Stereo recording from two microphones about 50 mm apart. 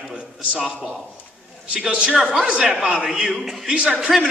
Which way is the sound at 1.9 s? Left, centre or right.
Right.